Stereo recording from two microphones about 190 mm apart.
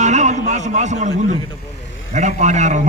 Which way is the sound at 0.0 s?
40° right (ahead or behind).